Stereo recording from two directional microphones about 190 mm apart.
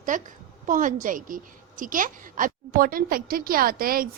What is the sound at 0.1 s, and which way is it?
A woman's voice, 45° right (ahead or behind).